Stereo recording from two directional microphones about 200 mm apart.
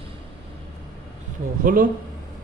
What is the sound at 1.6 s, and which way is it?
Speech, 45° right (ahead or behind).